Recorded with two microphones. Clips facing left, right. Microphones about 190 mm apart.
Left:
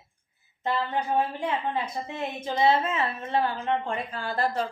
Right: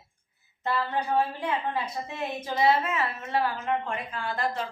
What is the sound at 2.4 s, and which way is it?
A woman's voice, 25° left (ahead or behind).